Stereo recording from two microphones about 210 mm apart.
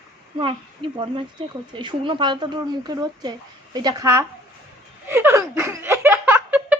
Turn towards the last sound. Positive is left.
turn(degrees=-10)  # may be behind; listen again after turning